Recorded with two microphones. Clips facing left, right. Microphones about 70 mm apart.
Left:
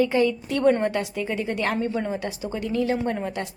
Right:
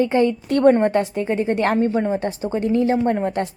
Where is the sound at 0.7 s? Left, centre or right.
Right.